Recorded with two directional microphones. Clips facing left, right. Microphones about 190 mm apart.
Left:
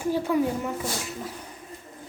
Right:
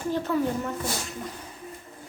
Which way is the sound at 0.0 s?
10° left (ahead or behind).